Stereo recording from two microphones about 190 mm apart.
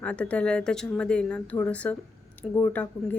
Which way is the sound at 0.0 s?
5° left (ahead or behind).